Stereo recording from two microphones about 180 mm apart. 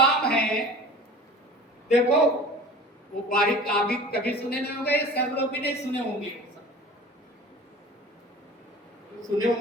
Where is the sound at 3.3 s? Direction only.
55° left (ahead or behind).